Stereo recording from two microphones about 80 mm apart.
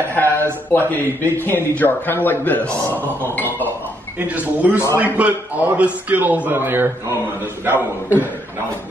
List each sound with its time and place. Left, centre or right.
0.1 s a sound: left
0.7 s a man's voice: left
4.3 s a man's voice: centre